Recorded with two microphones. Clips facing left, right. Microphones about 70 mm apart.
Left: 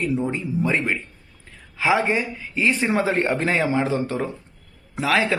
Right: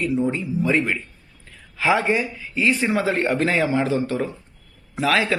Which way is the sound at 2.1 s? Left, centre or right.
Left.